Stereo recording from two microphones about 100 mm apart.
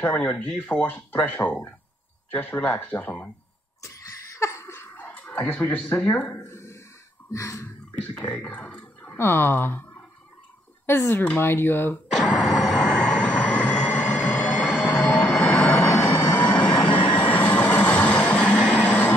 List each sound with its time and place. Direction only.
0.0 s speech: 20° left (ahead or behind)
3.8 s a sound: 30° left (ahead or behind)
4.9 s speech: 15° left (ahead or behind)
6.2 s a sound: 30° left (ahead or behind)
7.2 s speech: 30° left (ahead or behind)
8.3 s speech: 10° left (ahead or behind)
9.0 s speech: 25° left (ahead or behind)
12.2 s music: 5° left (ahead or behind)
15.0 s vehicle: 15° left (ahead or behind)
16.9 s vehicle: 55° left (ahead or behind)
17.3 s vehicle: 15° left (ahead or behind)